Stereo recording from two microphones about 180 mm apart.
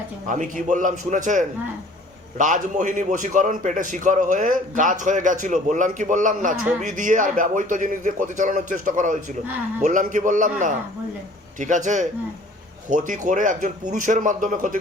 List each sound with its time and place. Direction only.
0.3 s a man's voice: 45° right (ahead or behind)